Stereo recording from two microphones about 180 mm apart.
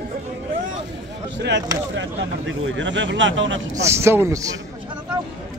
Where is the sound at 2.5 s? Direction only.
90° right.